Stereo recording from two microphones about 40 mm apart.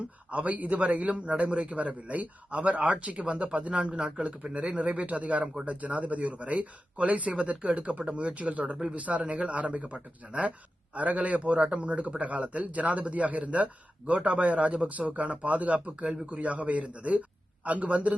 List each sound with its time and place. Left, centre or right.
0.3 s speech: right
8.7 s speech: centre
9.0 s speech: right